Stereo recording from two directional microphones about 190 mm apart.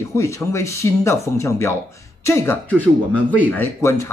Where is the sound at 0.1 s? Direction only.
15° left (ahead or behind).